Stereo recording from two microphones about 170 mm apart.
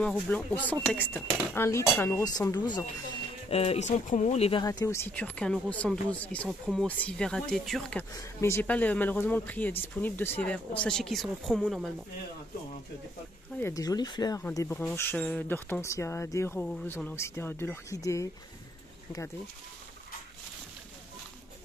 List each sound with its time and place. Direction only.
0.0 s speech: 10° left (ahead or behind); by 2.8 s 25° left (ahead or behind)
3.4 s speech: 35° left (ahead or behind)
4.6 s speech: 15° left (ahead or behind); by 8.0 s centre (ahead or behind)
8.1 s speech: 15° left (ahead or behind)
13.6 s speech: 15° left (ahead or behind)